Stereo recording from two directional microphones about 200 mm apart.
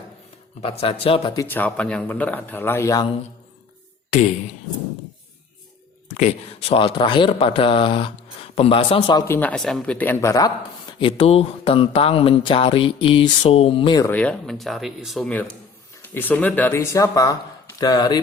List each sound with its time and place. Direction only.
0.6 s speech: 30° left (ahead or behind)
1.5 s a man's voice: 10° left (ahead or behind)
6.1 s speech: 35° left (ahead or behind)
9.2 s a man's voice: 10° left (ahead or behind)
11.0 s speech: 25° left (ahead or behind)
14.1 s a man's voice: 5° left (ahead or behind)